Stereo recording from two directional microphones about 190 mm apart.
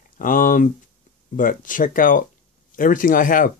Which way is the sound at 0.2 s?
45° left (ahead or behind).